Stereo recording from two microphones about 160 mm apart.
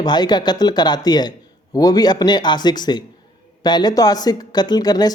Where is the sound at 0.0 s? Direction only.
25° left (ahead or behind).